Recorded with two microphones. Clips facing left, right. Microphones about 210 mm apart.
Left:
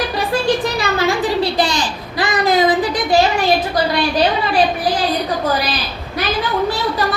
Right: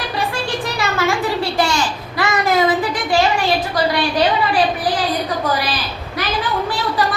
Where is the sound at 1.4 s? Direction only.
35° left (ahead or behind).